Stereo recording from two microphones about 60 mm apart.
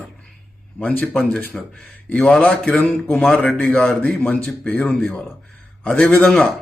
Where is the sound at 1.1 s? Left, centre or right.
Centre.